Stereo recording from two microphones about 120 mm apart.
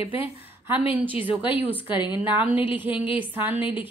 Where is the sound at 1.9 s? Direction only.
40° left (ahead or behind).